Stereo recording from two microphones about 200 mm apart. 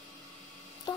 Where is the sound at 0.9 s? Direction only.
20° left (ahead or behind).